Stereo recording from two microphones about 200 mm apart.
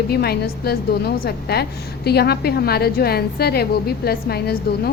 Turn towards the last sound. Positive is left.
turn(degrees=50)  # may be behind; listen again after turning